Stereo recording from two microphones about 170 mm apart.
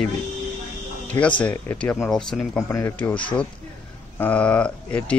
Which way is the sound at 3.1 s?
30° left (ahead or behind).